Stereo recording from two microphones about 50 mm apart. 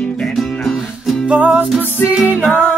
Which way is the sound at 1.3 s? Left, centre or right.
Right.